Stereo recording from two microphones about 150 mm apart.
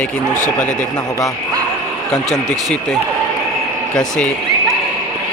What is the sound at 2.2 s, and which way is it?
Speech, 25° right (ahead or behind).